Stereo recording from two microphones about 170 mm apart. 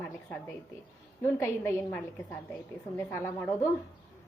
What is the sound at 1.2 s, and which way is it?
A woman's voice, 15° left (ahead or behind).